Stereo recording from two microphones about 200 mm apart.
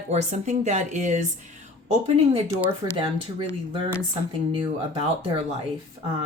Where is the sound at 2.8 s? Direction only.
20° right (ahead or behind).